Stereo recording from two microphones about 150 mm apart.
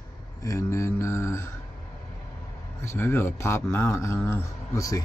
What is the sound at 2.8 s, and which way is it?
A man's voice, 15° left (ahead or behind).